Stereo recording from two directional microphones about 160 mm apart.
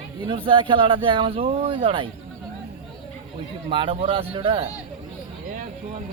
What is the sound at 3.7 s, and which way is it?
Speech, 30° right (ahead or behind).